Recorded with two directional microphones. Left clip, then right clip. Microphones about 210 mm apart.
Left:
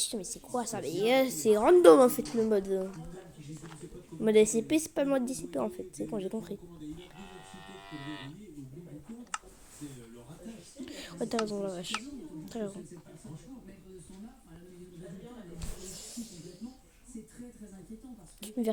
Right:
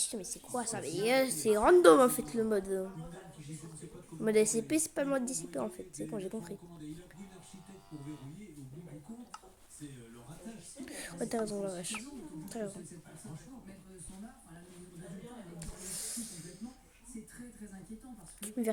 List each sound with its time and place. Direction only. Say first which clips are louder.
0.0 s a woman's voice: left 4 dB; 10° left (ahead or behind)
4.2 s a woman's voice: left 5 dB; 10° left (ahead or behind)
7.9 s livestock: left 5 dB; 20° left (ahead or behind)
10.8 s speech: left 2 dB; centre (ahead or behind)
15.5 s a sound: even; centre (ahead or behind)
18.3 s a sound: left 3 dB; 5° left (ahead or behind)